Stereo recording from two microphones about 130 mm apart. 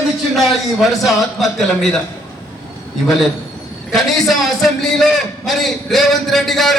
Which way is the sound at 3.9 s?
Centre (ahead or behind).